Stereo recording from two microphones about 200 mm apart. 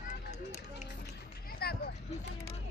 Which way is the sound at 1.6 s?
50° left (ahead or behind).